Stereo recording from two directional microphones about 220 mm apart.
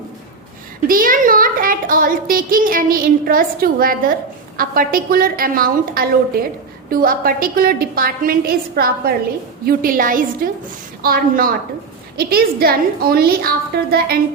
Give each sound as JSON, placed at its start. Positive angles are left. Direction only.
{"t": 0.9, "sound": "a woman's voice", "side_deg": -40}